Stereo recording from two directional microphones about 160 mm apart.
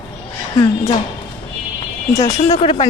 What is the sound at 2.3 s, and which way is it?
Speech, 45° left (ahead or behind).